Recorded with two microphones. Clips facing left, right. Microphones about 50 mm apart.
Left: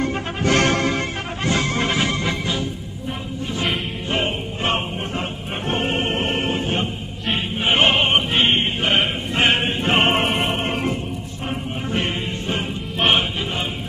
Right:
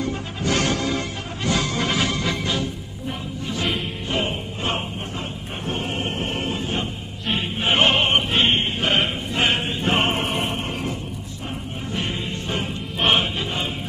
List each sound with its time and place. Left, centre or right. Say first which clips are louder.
0.0 s music: left 4 dB; left
2.3 s music: left 1 dB; centre
4.1 s music: left 2 dB; left
5.7 s choir: left 5 dB; left
7.2 s choir: left 1 dB; centre
7.6 s opera: left 1 dB; centre
8.5 s choir: left 2 dB; left
9.3 s music: left 4 dB; left
11.9 s music: left 3 dB; left
13.0 s music: left 1 dB; centre